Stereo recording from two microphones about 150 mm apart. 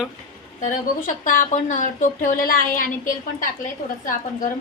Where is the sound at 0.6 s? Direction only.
60° left (ahead or behind).